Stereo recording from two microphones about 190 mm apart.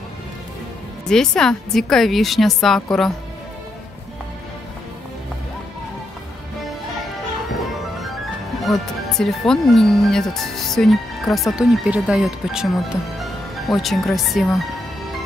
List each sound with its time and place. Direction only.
1.0 s speech: 5° left (ahead or behind)
8.6 s speech: centre (ahead or behind)